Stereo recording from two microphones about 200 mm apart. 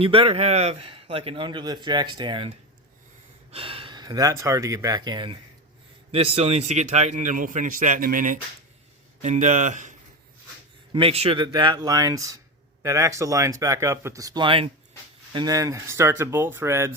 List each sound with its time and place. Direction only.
0.0 s a man's voice: 25° right (ahead or behind)
3.5 s a man's voice: 25° right (ahead or behind)
10.9 s a man's voice: 30° right (ahead or behind); by 16.9 s 15° right (ahead or behind)